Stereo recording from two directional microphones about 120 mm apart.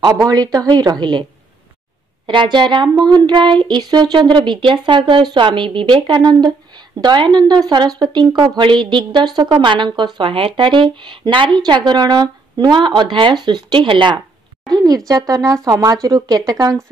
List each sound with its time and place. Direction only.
0.0 s speech: 30° right (ahead or behind)
2.2 s speech: 40° right (ahead or behind)
14.7 s a sound: 35° right (ahead or behind)
15.0 s speech: 30° right (ahead or behind)